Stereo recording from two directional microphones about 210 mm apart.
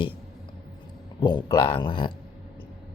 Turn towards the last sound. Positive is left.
turn(degrees=25)  # may be behind; listen again after turning